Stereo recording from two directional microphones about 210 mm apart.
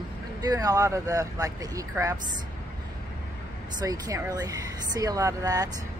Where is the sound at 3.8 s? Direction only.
15° right (ahead or behind).